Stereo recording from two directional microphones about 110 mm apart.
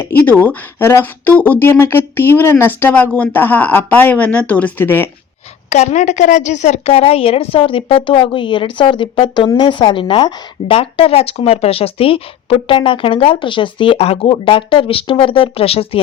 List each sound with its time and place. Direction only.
0.0 s speech: 20° left (ahead or behind)
5.7 s a woman's voice: 90° left; by 10.8 s 45° left (ahead or behind)
10.8 s a woman's voice: 60° left (ahead or behind)
14.3 s a woman's voice: 50° left (ahead or behind)